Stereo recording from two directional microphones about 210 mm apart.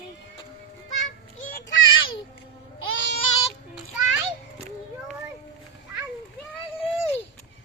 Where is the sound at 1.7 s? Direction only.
70° left (ahead or behind).